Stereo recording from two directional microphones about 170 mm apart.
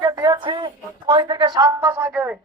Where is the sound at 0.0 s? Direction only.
20° right (ahead or behind).